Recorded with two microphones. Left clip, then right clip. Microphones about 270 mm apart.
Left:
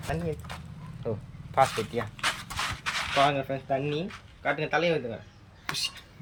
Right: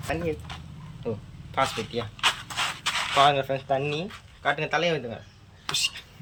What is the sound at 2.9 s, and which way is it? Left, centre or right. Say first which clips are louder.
Speech: right 4 dB; centre.